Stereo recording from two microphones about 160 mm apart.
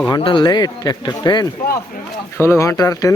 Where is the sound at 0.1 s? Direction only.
30° left (ahead or behind).